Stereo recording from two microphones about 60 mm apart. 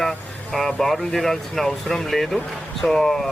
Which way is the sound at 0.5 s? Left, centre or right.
Centre.